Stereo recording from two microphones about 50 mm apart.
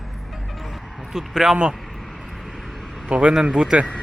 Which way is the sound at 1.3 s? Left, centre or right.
Centre.